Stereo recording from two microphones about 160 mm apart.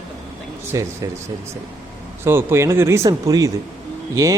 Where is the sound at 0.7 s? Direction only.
20° right (ahead or behind).